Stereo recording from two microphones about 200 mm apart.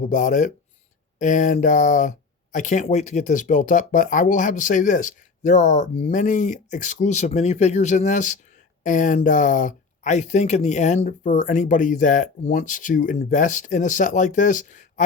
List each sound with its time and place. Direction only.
0.0 s speech: 40° left (ahead or behind)